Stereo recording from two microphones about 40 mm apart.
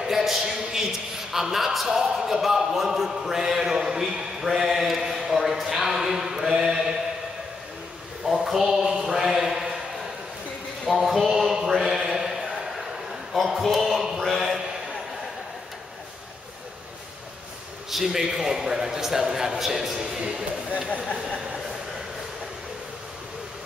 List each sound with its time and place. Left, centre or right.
0.0 s speech: centre
8.5 s speech: centre
10.9 s speech: centre
11.7 s a sound: centre
13.3 s a man's voice: centre
17.9 s speech: centre